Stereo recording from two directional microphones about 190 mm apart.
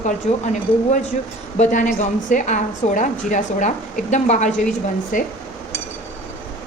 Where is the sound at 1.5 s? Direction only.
40° left (ahead or behind).